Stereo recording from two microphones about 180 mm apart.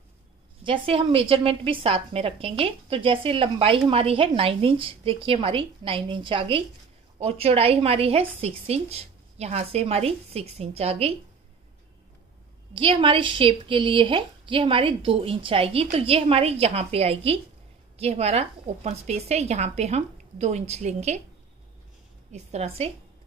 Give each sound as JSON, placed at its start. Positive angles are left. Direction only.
{"t": 0.7, "sound": "a woman's voice", "side_deg": -30}
{"t": 12.7, "sound": "a woman's voice", "side_deg": -30}
{"t": 22.3, "sound": "a woman's voice", "side_deg": -35}